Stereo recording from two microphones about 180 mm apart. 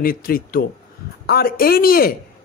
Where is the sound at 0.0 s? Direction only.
55° left (ahead or behind).